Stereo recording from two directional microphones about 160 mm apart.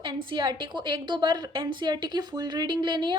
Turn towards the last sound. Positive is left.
turn(degrees=-30)  # may be behind; listen again after turning